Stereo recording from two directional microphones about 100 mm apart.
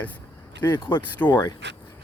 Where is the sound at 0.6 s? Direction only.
25° left (ahead or behind).